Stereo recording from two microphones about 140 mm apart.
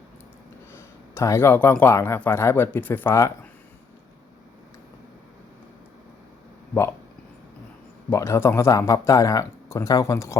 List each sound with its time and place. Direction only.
0.7 s speech: 20° left (ahead or behind)
8.1 s speech: 20° left (ahead or behind)